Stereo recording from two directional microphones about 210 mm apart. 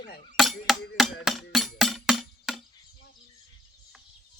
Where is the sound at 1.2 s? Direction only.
Centre (ahead or behind).